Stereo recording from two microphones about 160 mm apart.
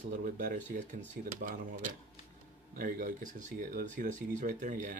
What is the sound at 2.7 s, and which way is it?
Speech, 55° right (ahead or behind).